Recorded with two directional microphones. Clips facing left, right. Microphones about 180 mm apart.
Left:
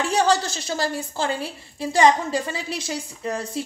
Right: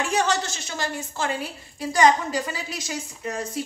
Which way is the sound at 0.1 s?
35° left (ahead or behind).